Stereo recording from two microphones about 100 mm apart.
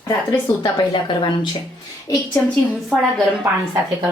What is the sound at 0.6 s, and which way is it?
Speech, 50° left (ahead or behind).